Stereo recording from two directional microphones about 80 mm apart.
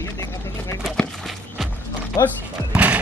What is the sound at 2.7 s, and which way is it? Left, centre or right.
Music, centre.